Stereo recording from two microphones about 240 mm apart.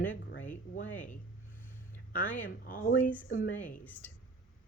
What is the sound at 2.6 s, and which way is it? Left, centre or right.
Speech, left.